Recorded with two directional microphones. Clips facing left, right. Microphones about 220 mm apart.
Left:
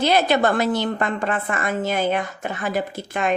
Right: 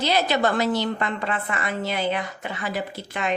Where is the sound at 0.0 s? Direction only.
55° left (ahead or behind).